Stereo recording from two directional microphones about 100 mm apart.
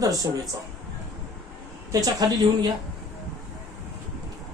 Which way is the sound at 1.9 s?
40° right (ahead or behind).